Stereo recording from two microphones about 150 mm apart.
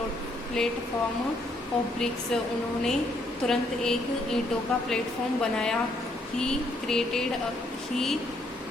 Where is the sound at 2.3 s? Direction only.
5° left (ahead or behind).